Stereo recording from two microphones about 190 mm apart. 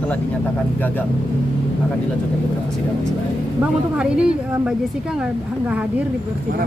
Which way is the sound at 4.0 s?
5° right (ahead or behind).